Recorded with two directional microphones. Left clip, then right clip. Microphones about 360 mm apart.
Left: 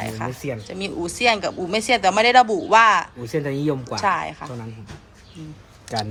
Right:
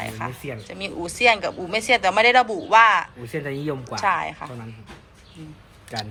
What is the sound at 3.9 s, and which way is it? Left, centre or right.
Speech, centre.